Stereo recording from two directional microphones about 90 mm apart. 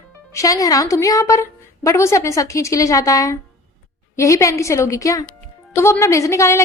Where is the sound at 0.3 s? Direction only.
40° left (ahead or behind).